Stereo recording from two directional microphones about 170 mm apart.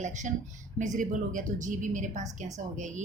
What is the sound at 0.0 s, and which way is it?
A woman's voice, 45° right (ahead or behind).